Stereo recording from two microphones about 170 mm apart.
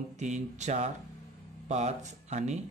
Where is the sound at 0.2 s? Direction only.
45° right (ahead or behind).